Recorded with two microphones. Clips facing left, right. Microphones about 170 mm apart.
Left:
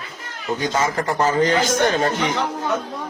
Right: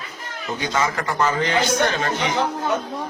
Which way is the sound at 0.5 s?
40° left (ahead or behind).